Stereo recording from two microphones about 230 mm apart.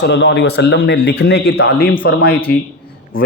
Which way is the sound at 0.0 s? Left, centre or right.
Left.